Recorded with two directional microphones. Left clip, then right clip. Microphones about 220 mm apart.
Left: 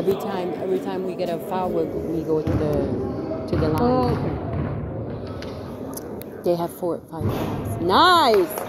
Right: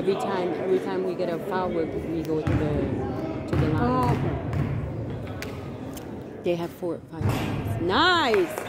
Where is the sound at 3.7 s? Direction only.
Centre (ahead or behind).